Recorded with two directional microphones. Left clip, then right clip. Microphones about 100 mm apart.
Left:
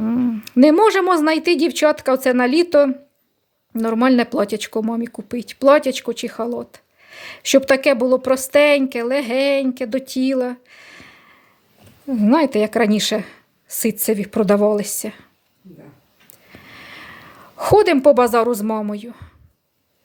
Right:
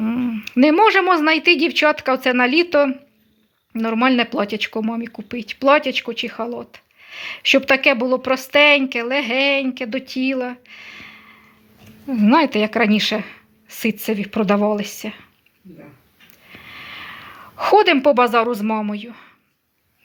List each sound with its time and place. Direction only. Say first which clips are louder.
0.0 s owl: left 2 dB; 40° left (ahead or behind)
0.6 s speech: even; 60° left (ahead or behind)
3.8 s a woman's voice: left 1 dB; 80° left
5.3 s speech: left 2 dB; 85° left; by 11.3 s 55° left (ahead or behind)
12.1 s a woman's voice: even; 45° left (ahead or behind); by 15.3 s 75° left (ahead or behind)
16.5 s a sound: right 3 dB; 60° left (ahead or behind)
17.6 s speech: even; 55° left (ahead or behind)